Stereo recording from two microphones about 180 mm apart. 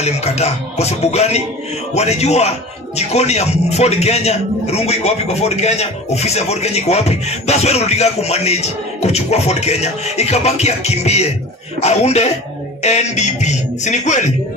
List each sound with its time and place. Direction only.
0.0 s a man's voice: 35° left (ahead or behind)